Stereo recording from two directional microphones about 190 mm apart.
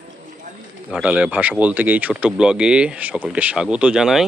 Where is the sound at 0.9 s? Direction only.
5° right (ahead or behind).